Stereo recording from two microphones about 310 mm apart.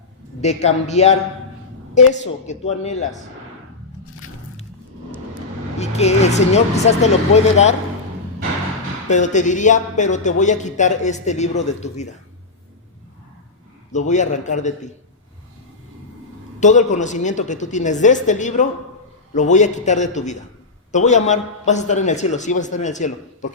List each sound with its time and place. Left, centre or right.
0.4 s speech: left
2.5 s speech: left
5.8 s speech: left
9.0 s speech: left
13.9 s speech: left
16.6 s speech: left